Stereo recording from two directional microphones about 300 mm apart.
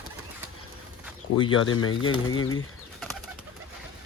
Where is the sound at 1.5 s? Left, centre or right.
Left.